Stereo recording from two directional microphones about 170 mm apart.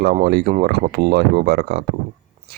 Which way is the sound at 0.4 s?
50° right (ahead or behind).